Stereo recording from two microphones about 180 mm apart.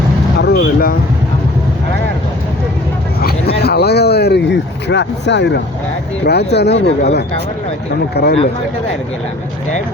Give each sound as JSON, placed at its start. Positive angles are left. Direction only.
{"t": 0.3, "sound": "vehicle", "side_deg": 65}
{"t": 3.2, "sound": "a sound", "side_deg": 60}
{"t": 6.5, "sound": "speech", "side_deg": 70}